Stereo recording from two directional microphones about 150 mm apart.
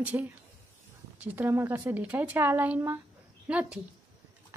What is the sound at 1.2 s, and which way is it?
A woman's voice, 15° right (ahead or behind).